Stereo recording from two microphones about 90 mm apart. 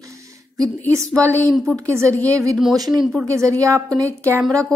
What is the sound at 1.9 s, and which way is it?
Speech, 30° right (ahead or behind).